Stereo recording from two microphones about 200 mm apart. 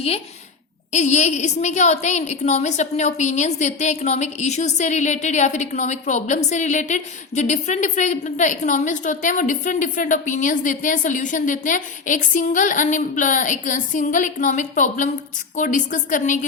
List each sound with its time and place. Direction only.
0.9 s a woman's voice: 35° left (ahead or behind)